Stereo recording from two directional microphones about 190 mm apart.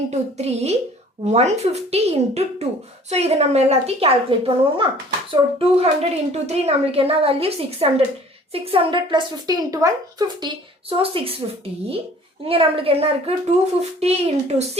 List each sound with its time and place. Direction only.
0.1 s a woman's voice: 35° right (ahead or behind)
12.5 s a woman's voice: 30° right (ahead or behind)